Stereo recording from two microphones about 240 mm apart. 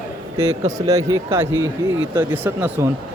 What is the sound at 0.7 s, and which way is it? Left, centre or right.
Speech, centre.